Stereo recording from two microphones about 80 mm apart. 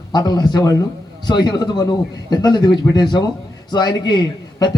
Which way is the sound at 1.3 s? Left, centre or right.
Left.